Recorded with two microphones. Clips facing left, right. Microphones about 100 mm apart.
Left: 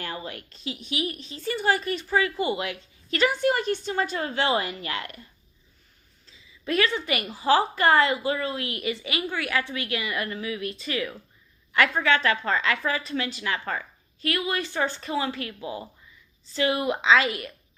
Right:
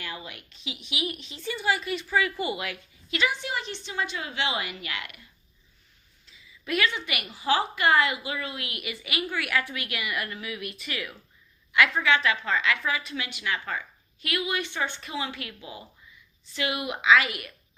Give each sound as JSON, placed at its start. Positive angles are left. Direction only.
{"t": 0.0, "sound": "a woman's voice", "side_deg": 40}
{"t": 3.1, "sound": "a woman's voice", "side_deg": 45}
{"t": 6.2, "sound": "a woman's voice", "side_deg": 30}